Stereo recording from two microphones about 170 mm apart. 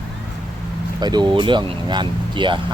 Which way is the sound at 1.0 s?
25° right (ahead or behind).